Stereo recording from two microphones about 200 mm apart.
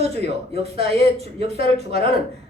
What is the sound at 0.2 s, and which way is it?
Speech, 30° right (ahead or behind).